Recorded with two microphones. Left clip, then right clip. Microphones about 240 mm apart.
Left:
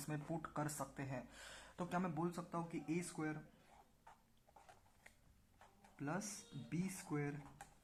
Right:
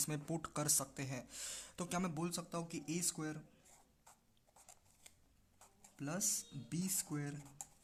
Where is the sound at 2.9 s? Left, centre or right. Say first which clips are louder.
Right 3 dB; right.